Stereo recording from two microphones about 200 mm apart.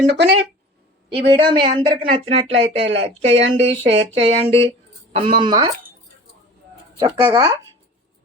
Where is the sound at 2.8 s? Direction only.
65° right (ahead or behind).